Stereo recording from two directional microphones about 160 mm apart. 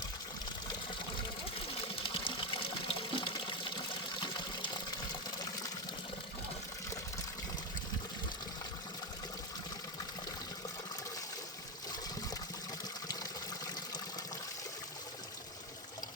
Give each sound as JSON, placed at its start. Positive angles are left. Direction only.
{"t": 2.0, "sound": "water", "side_deg": 30}